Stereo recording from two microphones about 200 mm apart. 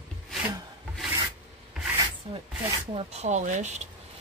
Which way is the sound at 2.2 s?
25° right (ahead or behind).